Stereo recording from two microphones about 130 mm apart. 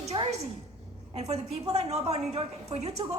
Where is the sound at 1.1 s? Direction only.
55° right (ahead or behind).